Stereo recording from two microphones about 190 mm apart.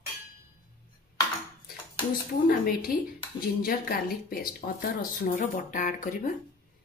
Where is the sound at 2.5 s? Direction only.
45° left (ahead or behind).